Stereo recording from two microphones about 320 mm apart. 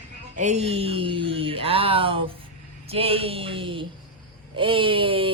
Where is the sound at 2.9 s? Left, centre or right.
Centre.